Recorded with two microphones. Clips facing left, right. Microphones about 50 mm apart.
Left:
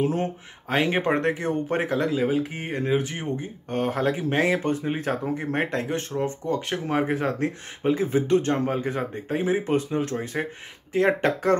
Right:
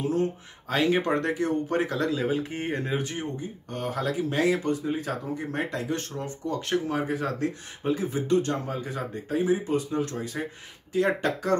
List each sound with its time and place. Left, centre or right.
0.0 s speech: left; by 2.8 s centre
2.8 s speech: left
3.3 s speech: left
5.9 s speech: left
6.9 s speech: left